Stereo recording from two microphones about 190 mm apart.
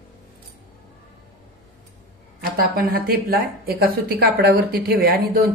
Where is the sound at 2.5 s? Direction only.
50° right (ahead or behind).